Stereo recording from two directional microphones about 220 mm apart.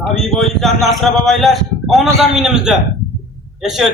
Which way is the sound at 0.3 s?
Centre (ahead or behind).